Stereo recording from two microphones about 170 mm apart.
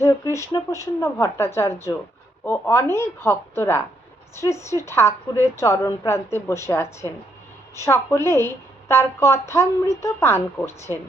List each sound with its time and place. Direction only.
0.0 s a woman's voice: 15° left (ahead or behind)